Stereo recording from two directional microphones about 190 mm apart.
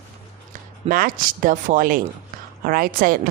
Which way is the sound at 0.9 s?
50° right (ahead or behind).